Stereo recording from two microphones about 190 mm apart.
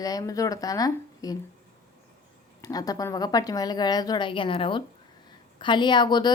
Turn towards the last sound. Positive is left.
turn(degrees=25)  # may be behind; listen again after turning